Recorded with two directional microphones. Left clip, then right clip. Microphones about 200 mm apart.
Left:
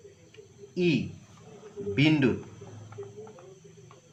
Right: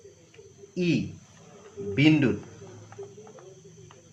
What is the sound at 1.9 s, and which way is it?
Speech, 25° right (ahead or behind).